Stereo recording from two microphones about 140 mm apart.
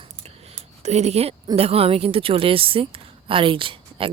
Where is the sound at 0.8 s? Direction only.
50° right (ahead or behind).